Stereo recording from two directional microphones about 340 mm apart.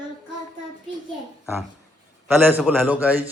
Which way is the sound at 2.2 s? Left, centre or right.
Centre.